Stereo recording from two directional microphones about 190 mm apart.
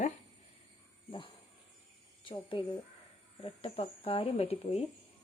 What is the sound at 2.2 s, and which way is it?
Speech, 25° left (ahead or behind).